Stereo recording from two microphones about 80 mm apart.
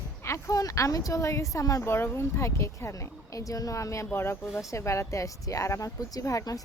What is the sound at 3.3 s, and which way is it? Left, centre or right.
Speech, left.